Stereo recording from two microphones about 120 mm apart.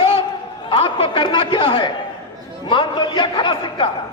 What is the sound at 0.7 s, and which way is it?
Speech, 45° left (ahead or behind).